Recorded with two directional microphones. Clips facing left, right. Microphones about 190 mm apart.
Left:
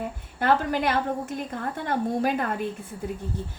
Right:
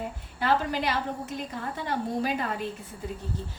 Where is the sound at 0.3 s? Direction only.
50° left (ahead or behind).